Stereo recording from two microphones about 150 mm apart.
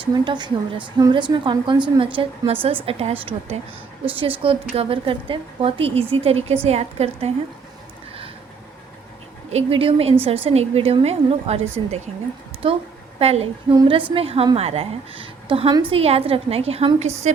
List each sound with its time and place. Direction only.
0.0 s a woman's voice: 30° right (ahead or behind)
9.5 s a woman's voice: 40° right (ahead or behind)
13.1 s a woman's voice: 40° right (ahead or behind)